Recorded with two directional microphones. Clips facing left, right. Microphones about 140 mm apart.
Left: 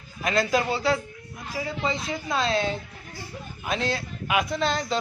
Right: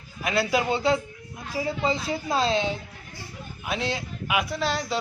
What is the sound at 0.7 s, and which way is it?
A woman's voice, 25° right (ahead or behind).